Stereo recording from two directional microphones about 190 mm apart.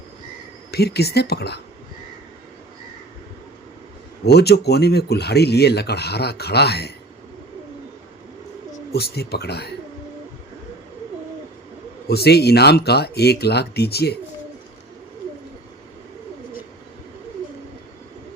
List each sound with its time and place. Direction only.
0.7 s speech: 60° left (ahead or behind)
4.3 s speech: 60° left (ahead or behind)
8.9 s speech: 55° left (ahead or behind)
12.0 s speech: 55° left (ahead or behind)